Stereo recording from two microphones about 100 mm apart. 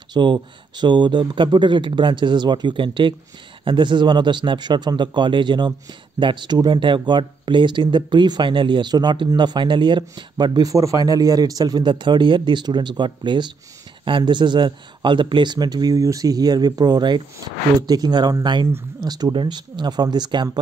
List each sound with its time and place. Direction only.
0.1 s speech: 50° right (ahead or behind)